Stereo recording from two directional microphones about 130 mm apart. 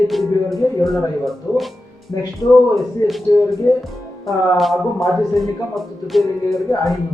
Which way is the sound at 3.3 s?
35° left (ahead or behind).